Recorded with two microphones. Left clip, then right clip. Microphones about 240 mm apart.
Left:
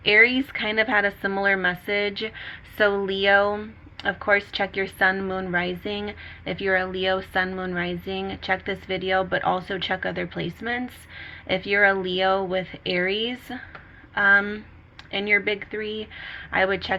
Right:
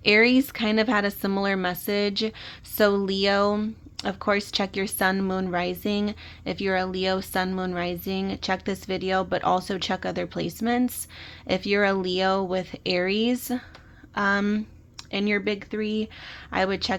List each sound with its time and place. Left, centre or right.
0.0 s speech: right